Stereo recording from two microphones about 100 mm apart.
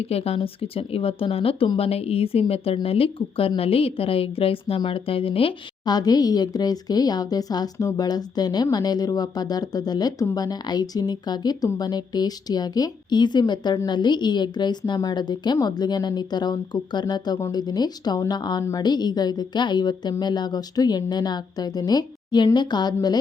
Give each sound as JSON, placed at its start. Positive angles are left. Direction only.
{"t": 0.0, "sound": "a woman's voice", "side_deg": 90}
{"t": 5.8, "sound": "a woman's voice", "side_deg": 40}